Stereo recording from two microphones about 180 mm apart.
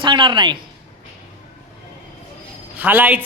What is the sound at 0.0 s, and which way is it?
Speech, 25° right (ahead or behind).